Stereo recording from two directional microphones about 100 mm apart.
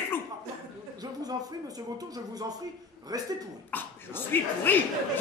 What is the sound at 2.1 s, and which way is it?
Speech, 40° right (ahead or behind).